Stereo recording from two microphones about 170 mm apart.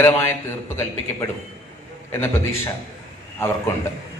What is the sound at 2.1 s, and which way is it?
Speech, 15° left (ahead or behind).